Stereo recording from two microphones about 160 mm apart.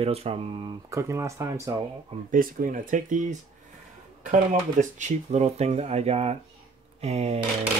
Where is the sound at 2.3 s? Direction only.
55° right (ahead or behind); by 7.3 s 40° right (ahead or behind).